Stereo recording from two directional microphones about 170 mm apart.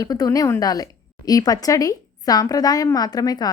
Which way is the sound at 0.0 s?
20° left (ahead or behind).